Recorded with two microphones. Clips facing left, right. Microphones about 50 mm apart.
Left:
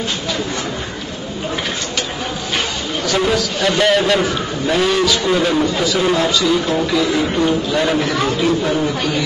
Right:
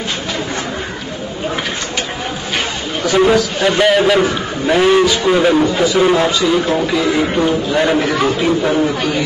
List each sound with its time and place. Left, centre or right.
3.1 s a man's voice: centre
4.6 s a man's voice: centre